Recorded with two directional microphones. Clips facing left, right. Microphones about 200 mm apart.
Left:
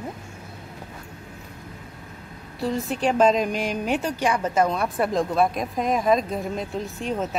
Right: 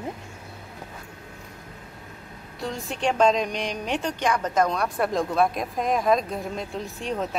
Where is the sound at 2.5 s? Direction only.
Centre (ahead or behind).